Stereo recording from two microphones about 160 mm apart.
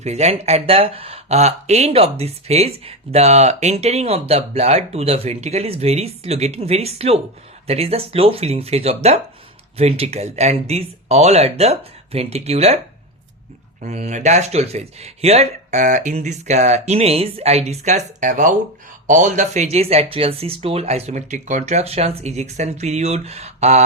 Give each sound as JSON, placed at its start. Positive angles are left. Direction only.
{"t": 0.0, "sound": "speech", "side_deg": -45}
{"t": 13.8, "sound": "speech", "side_deg": -45}